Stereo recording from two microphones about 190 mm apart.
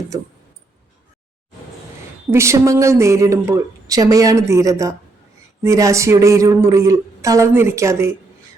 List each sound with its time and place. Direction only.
2.3 s a woman's voice: 15° right (ahead or behind)